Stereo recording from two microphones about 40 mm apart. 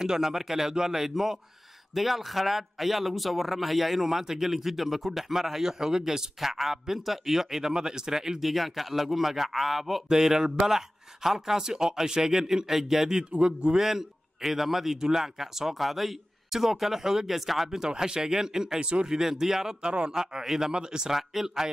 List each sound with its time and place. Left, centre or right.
0.0 s a man's voice: centre
7.7 s a man's voice: centre
8.4 s a man's voice: centre
13.3 s a man's voice: right
13.7 s a man's voice: centre
18.8 s a man's voice: right
19.0 s a man's voice: centre
19.8 s a man's voice: right
21.2 s speech: centre